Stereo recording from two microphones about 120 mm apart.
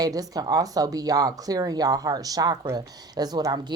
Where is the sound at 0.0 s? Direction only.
30° right (ahead or behind).